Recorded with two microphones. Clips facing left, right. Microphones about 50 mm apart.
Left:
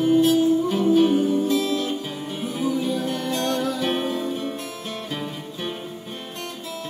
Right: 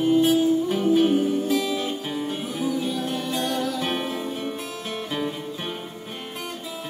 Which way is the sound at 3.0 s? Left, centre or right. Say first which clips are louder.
Left 1 dB; right.